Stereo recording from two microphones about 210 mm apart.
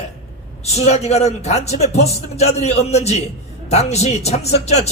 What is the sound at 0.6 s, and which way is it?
A man's voice, 30° left (ahead or behind).